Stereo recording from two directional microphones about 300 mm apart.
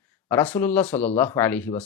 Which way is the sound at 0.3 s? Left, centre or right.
Centre.